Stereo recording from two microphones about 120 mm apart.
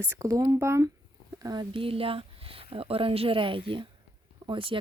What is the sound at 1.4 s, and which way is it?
Speech, 35° right (ahead or behind).